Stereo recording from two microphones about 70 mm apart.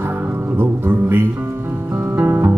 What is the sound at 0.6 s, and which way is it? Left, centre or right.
Music, right.